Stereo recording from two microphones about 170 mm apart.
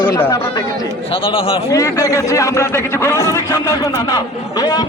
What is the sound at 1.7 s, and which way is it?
A man's voice, 20° left (ahead or behind).